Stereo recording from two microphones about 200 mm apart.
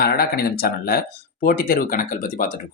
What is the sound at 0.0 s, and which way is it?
Speech, 50° left (ahead or behind).